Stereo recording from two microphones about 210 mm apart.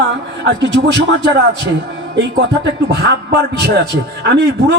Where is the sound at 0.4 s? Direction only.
55° right (ahead or behind).